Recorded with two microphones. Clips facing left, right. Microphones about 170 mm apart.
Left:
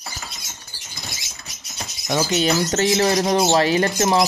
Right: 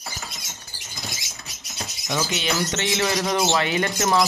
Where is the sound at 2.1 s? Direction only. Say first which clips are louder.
Left 6 dB; 40° left (ahead or behind).